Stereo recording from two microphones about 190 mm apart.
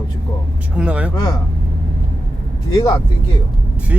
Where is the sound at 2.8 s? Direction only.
25° left (ahead or behind).